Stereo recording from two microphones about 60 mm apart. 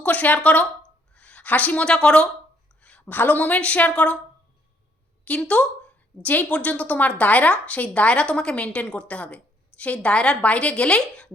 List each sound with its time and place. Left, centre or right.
0.0 s a woman's voice: left
2.8 s a woman's voice: left
5.4 s a woman's voice: left